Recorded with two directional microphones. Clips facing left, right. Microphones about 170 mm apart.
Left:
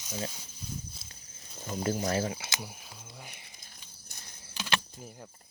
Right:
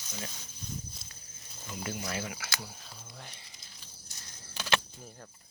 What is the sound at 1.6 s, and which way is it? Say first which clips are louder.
Speech: left 7 dB; 40° left (ahead or behind).